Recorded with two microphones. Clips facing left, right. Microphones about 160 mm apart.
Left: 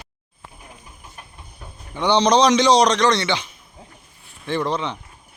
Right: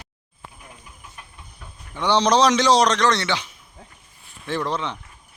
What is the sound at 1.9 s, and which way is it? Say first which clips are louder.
A man's voice: left 2 dB; centre (ahead or behind).